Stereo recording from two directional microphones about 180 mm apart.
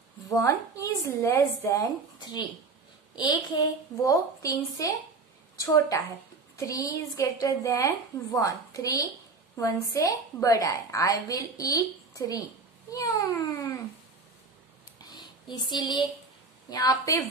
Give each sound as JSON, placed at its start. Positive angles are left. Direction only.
{"t": 0.3, "sound": "a woman's voice", "side_deg": 15}
{"t": 15.0, "sound": "a sound", "side_deg": 20}
{"t": 16.7, "sound": "a woman's voice", "side_deg": 20}